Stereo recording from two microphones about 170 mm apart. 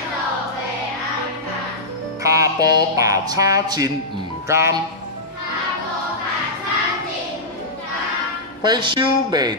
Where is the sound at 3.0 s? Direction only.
20° right (ahead or behind).